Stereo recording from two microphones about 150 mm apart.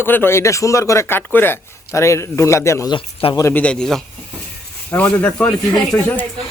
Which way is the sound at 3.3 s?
20° left (ahead or behind).